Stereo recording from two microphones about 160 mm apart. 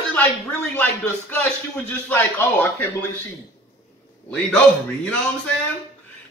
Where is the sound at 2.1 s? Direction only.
10° left (ahead or behind).